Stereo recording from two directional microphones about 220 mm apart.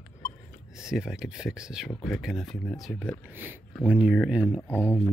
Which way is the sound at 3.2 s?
10° right (ahead or behind).